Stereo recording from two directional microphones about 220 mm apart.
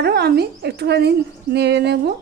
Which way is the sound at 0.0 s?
45° right (ahead or behind).